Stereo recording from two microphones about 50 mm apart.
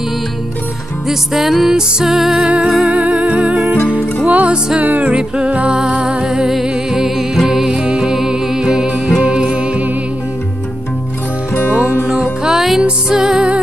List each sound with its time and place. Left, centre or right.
1.0 s music: centre
2.4 s music: centre
11.7 s music: right
12.1 s music: centre